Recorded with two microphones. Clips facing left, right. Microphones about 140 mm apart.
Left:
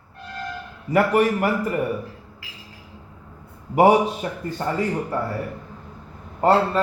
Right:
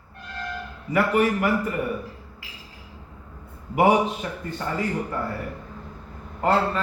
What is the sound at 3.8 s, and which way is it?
Speech, 35° left (ahead or behind).